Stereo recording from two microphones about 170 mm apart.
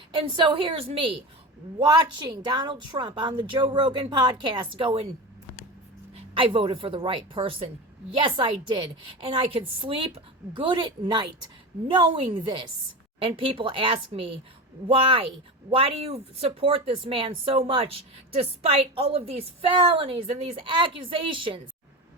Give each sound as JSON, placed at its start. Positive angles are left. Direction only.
{"t": 0.1, "sound": "a woman's voice", "side_deg": -30}
{"t": 6.1, "sound": "a woman's voice", "side_deg": -30}